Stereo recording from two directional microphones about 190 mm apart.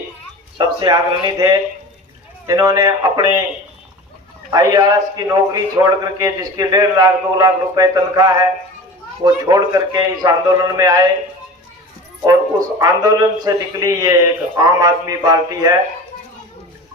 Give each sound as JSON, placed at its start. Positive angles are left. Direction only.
{"t": 0.6, "sound": "a sound", "side_deg": -20}
{"t": 1.3, "sound": "a man's voice", "side_deg": -20}
{"t": 4.5, "sound": "a man's voice", "side_deg": -20}
{"t": 12.2, "sound": "a man's voice", "side_deg": -20}